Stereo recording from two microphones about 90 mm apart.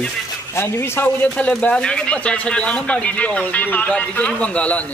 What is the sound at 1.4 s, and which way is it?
Speech, 15° left (ahead or behind).